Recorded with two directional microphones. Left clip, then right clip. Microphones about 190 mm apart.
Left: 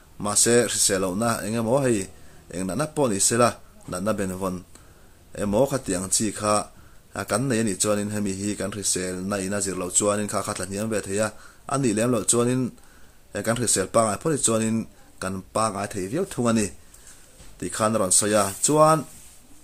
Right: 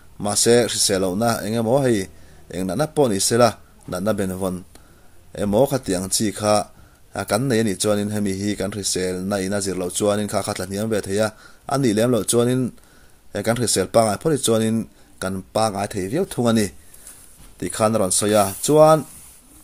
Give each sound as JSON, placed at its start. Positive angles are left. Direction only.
{"t": 0.2, "sound": "speech", "side_deg": -20}